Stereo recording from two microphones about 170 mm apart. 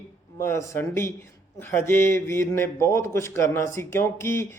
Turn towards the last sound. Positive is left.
turn(degrees=15)  # may be behind; listen again after turning